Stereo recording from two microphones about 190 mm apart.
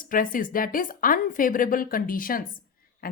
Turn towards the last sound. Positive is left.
turn(degrees=50)  # may be behind; listen again after turning